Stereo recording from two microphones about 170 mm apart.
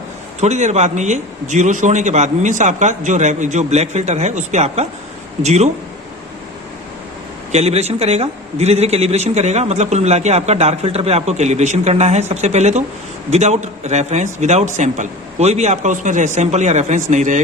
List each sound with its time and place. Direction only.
0.3 s a man's voice: 45° right (ahead or behind)
7.5 s a man's voice: 40° right (ahead or behind)